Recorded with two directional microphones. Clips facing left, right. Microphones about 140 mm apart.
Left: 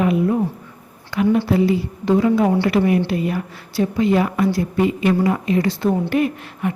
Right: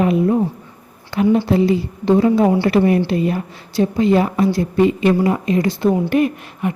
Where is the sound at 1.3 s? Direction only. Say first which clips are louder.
Right 2 dB; 25° right (ahead or behind).